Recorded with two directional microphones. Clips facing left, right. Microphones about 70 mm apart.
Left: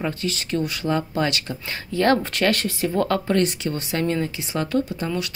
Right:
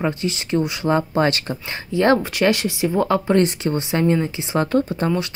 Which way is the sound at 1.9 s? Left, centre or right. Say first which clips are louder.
Right 3 dB; centre.